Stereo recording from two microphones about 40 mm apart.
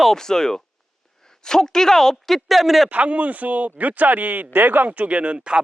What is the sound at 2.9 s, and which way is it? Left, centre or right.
Speech, right.